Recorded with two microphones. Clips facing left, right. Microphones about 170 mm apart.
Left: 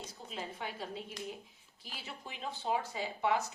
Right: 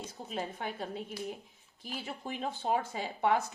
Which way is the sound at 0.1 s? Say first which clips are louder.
Right 5 dB; 55° right (ahead or behind).